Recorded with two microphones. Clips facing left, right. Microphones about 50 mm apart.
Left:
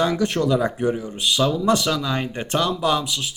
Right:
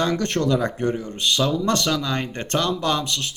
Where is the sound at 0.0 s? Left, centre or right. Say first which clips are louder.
Left 1 dB; centre.